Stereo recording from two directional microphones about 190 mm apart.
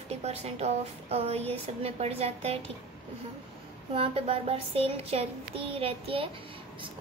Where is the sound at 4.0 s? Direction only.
30° right (ahead or behind).